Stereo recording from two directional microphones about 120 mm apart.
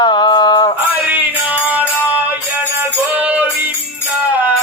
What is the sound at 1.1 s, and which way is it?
Music, 15° right (ahead or behind).